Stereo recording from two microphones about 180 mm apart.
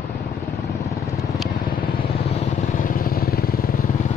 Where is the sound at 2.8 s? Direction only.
50° left (ahead or behind).